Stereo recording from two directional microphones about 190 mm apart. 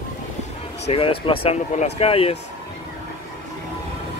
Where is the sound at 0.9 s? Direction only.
30° left (ahead or behind).